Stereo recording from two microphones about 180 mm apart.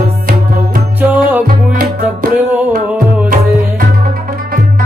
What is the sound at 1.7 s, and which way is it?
Music, 55° right (ahead or behind).